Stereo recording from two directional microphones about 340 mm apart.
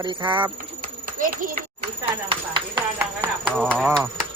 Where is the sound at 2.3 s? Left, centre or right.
Centre.